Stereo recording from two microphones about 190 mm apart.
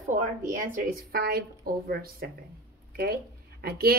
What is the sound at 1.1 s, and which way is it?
A woman's voice, 55° right (ahead or behind).